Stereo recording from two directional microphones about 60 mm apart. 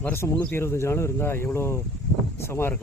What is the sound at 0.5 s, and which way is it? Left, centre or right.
Speech, left.